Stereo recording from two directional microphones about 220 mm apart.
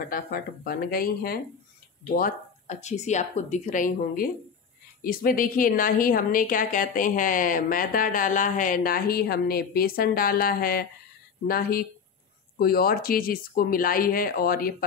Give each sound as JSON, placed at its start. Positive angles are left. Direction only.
{"t": 0.1, "sound": "a woman's voice", "side_deg": 40}